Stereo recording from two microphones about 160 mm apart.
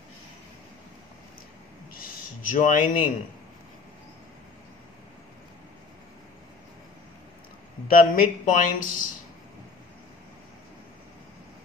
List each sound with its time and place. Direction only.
2.5 s speech: 50° left (ahead or behind)
7.9 s speech: 60° left (ahead or behind)